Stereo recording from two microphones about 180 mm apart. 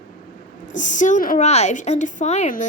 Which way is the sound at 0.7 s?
45° left (ahead or behind).